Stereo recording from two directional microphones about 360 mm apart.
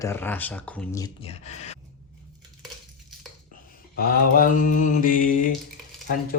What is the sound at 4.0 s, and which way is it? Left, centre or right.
Mantra, left.